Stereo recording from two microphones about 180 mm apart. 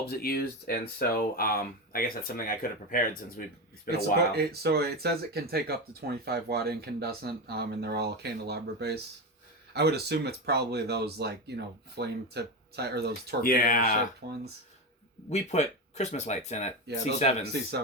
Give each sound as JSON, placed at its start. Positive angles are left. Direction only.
{"t": 0.1, "sound": "speech", "side_deg": 55}
{"t": 3.9, "sound": "speech", "side_deg": -60}
{"t": 13.4, "sound": "speech", "side_deg": 50}
{"t": 14.2, "sound": "speech", "side_deg": -60}
{"t": 15.3, "sound": "speech", "side_deg": 40}
{"t": 17.5, "sound": "speech", "side_deg": -65}